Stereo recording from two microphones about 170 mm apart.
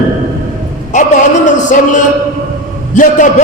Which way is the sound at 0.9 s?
45° left (ahead or behind).